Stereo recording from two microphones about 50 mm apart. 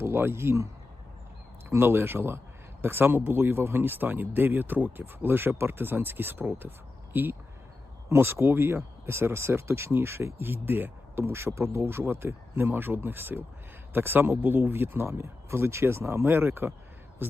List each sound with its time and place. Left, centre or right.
0.0 s speech: right
1.7 s speech: right
8.1 s speech: right